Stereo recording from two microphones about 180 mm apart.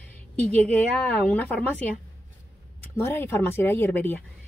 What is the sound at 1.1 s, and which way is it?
Speech, 10° left (ahead or behind).